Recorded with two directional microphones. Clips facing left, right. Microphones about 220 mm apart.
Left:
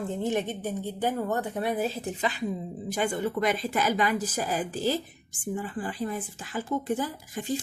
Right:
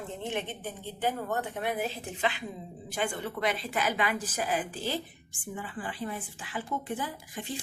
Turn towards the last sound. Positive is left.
turn(degrees=40)  # may be behind; listen again after turning